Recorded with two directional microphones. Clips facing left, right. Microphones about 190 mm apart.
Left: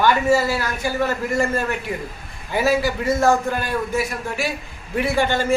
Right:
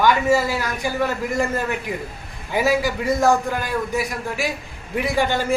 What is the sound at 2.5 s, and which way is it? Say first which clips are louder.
A man's voice: even; 15° right (ahead or behind).